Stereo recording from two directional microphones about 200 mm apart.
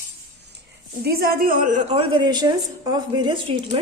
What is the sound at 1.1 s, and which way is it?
A woman's voice, 50° right (ahead or behind).